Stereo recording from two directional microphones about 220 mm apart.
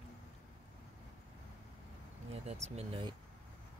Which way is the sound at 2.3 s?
30° right (ahead or behind).